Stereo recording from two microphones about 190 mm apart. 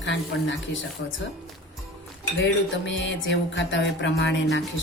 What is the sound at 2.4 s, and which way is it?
Music, 75° left (ahead or behind).